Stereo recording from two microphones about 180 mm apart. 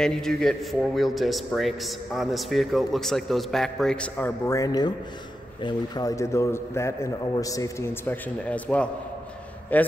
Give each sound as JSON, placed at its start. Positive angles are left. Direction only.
{"t": 0.0, "sound": "a man's voice", "side_deg": 5}
{"t": 4.5, "sound": "a man's voice", "side_deg": 20}